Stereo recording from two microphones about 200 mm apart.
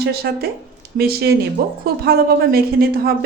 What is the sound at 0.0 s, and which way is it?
Speech, 50° right (ahead or behind).